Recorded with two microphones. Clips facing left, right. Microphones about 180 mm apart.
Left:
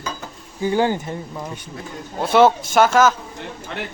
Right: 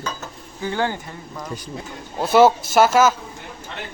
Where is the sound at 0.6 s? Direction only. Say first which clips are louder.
Left 5 dB; 15° left (ahead or behind).